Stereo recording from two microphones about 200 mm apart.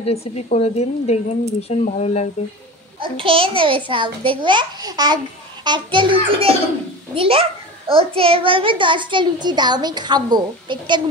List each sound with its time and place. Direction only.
0.0 s a woman's voice: 30° left (ahead or behind)
3.0 s a child's voice: 25° right (ahead or behind)